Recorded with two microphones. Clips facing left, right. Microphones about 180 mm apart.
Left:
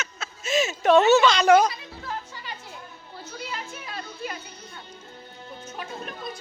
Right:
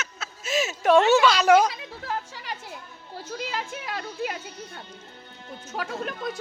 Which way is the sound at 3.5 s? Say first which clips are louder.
Right 4 dB; 80° right.